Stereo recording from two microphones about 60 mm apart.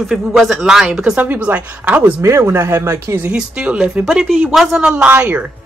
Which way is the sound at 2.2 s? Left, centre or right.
Right.